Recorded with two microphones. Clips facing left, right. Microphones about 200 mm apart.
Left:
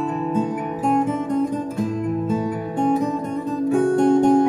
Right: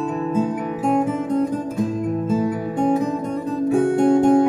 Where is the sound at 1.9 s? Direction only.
5° right (ahead or behind).